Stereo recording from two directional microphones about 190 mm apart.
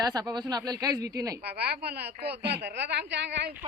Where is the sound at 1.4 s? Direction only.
60° right (ahead or behind).